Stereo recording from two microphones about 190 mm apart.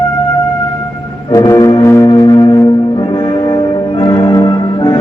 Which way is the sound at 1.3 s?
15° left (ahead or behind).